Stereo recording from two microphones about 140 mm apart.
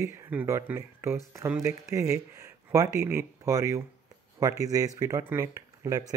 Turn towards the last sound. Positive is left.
turn(degrees=-20)  # may be behind; listen again after turning